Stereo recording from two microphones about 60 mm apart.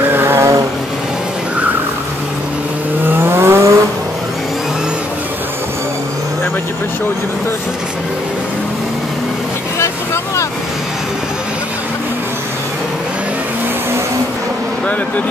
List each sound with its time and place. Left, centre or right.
0.1 s vehicle: right
3.1 s vehicle: right